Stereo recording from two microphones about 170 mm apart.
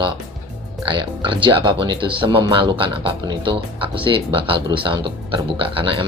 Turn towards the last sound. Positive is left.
turn(degrees=-30)  # may be behind; listen again after turning